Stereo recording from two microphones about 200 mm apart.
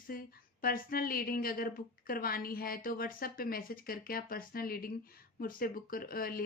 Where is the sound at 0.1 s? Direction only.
45° left (ahead or behind).